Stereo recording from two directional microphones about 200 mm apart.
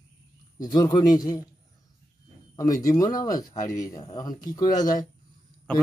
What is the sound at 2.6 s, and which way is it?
Speech, 15° left (ahead or behind).